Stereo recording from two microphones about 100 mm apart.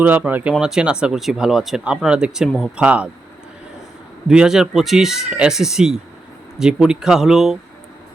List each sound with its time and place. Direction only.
0.0 s speech: 20° right (ahead or behind)
4.3 s speech: 5° right (ahead or behind)